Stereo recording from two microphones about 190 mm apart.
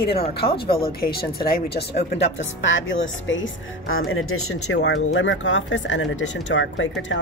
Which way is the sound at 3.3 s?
85° left.